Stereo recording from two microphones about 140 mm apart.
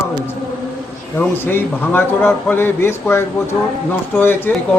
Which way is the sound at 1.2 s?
15° left (ahead or behind).